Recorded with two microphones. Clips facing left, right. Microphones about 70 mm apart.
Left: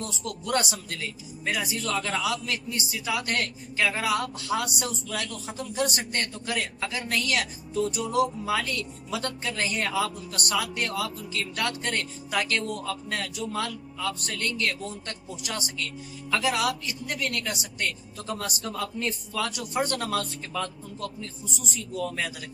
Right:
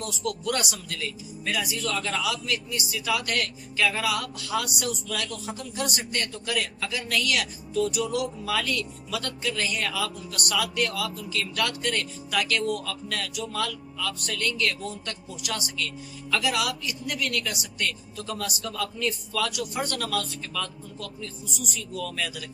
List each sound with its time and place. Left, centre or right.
0.0 s a man's voice: left